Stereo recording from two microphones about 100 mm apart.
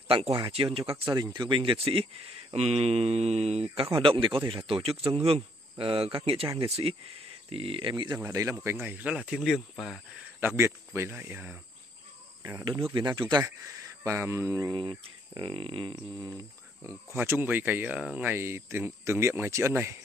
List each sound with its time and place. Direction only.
0.3 s speech: 60° right (ahead or behind)
1.0 s speech: 45° right (ahead or behind); by 2.0 s 65° right (ahead or behind)
2.5 s mantra: 90° right
3.9 s speech: 60° right (ahead or behind)
8.2 s speech: 30° right (ahead or behind)
8.6 s speech: 20° right (ahead or behind); by 9.9 s centre (ahead or behind)
10.4 s speech: 25° right (ahead or behind)
12.9 s speech: 50° right (ahead or behind)
14.0 s speech: 30° right (ahead or behind)
14.7 s speech: 55° right (ahead or behind)
16.8 s speech: 20° right (ahead or behind)